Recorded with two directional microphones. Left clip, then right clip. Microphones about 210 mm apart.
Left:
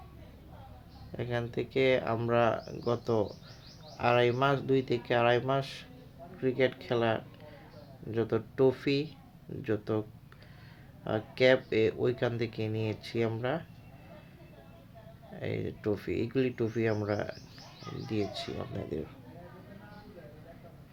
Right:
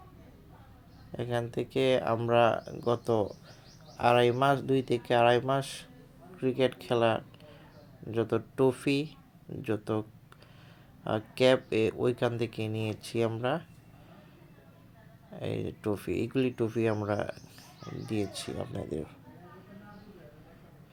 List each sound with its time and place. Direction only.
1.1 s speech: 15° right (ahead or behind)
15.4 s speech: 15° right (ahead or behind)